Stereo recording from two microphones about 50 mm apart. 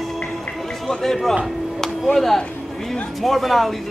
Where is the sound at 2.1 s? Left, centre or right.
Centre.